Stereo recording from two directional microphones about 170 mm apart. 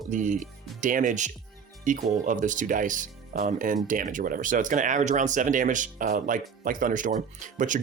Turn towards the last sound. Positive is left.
turn(degrees=-50)  # may be behind; listen again after turning